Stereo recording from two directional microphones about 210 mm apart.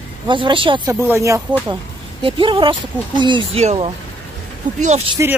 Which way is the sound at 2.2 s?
25° right (ahead or behind).